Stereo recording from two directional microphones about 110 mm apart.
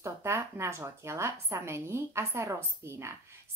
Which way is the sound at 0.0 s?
25° right (ahead or behind).